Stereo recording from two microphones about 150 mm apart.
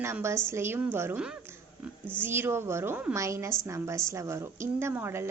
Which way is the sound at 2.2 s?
15° right (ahead or behind).